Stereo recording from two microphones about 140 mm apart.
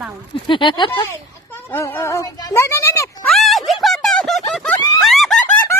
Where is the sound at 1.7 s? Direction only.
15° left (ahead or behind).